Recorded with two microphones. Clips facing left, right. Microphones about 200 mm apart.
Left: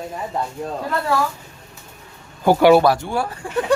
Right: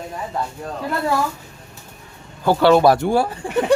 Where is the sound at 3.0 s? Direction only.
55° right (ahead or behind).